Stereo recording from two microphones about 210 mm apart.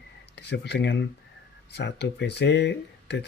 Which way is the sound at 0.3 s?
50° left (ahead or behind).